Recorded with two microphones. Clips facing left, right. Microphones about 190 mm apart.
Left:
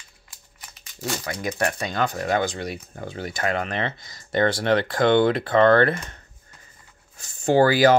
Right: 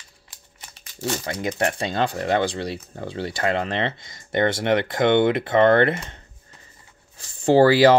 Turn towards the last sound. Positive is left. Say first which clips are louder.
# right 2 dB
turn(degrees=-30)  # may be behind; listen again after turning